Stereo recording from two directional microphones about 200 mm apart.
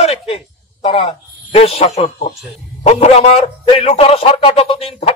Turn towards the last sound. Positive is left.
turn(degrees=30)  # may be behind; listen again after turning